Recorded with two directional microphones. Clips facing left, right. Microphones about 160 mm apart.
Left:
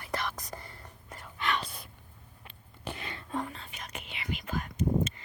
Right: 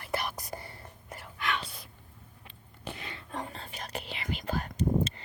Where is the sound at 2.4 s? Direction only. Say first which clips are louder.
Left 2 dB; 60° left (ahead or behind).